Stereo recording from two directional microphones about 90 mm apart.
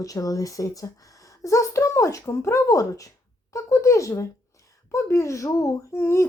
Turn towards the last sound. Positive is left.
turn(degrees=30)  # may be behind; listen again after turning